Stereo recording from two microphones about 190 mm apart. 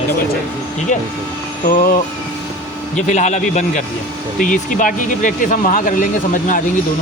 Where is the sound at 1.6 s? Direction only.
50° left (ahead or behind).